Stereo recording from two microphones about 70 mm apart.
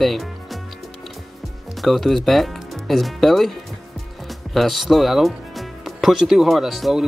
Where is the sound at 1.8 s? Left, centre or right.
Centre.